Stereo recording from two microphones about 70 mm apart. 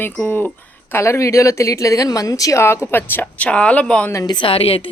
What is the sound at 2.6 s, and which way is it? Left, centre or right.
Speech, left.